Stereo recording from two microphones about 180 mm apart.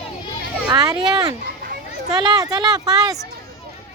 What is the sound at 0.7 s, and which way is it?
A child's voice, 20° right (ahead or behind).